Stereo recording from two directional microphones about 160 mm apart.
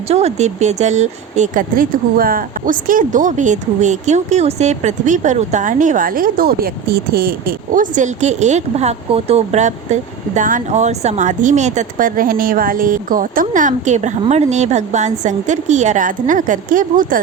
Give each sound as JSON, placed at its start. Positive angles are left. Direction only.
{"t": 0.1, "sound": "speech", "side_deg": -40}